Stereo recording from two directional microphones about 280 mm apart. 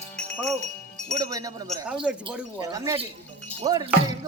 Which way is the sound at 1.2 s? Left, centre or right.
Centre.